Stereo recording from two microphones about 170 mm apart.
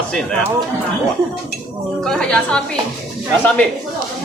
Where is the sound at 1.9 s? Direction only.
5° left (ahead or behind).